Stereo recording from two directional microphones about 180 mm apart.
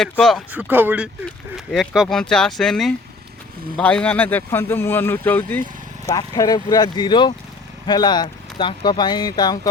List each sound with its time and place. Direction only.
0.0 s speech: centre (ahead or behind)
0.7 s speech: 10° right (ahead or behind); by 5.6 s 10° left (ahead or behind)
6.1 s speech: 20° left (ahead or behind)